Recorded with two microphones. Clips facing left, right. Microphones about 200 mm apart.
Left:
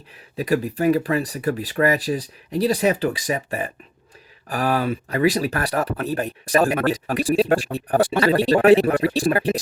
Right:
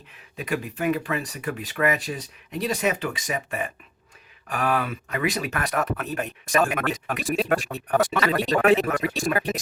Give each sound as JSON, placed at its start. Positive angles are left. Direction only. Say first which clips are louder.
{"t": 0.3, "sound": "speech", "louder": "left 7 dB", "side_deg": 35}